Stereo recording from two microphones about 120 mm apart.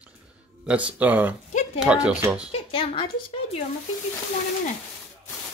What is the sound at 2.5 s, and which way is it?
Speech, 50° left (ahead or behind).